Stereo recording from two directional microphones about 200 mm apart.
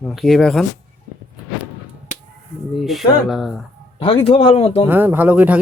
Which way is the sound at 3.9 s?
30° left (ahead or behind).